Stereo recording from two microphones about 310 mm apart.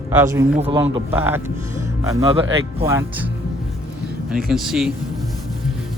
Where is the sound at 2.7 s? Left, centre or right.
Centre.